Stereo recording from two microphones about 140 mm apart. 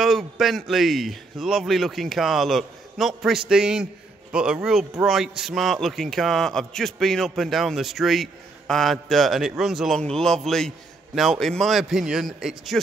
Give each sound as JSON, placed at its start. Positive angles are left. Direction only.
{"t": 0.0, "sound": "a man's voice", "side_deg": 0}